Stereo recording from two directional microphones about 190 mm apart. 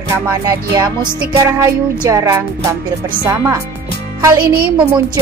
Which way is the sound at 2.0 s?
15° right (ahead or behind).